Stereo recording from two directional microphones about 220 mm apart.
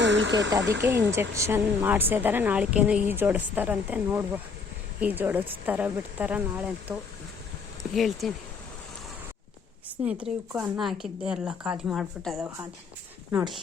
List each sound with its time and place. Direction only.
0.0 s snake: 55° right (ahead or behind)
0.6 s speech: 50° right (ahead or behind)
1.4 s a woman's voice: 10° right (ahead or behind)
7.9 s speech: centre (ahead or behind)
10.0 s speech: 5° right (ahead or behind)